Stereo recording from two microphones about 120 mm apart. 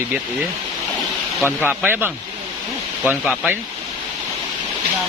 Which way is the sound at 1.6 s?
15° right (ahead or behind).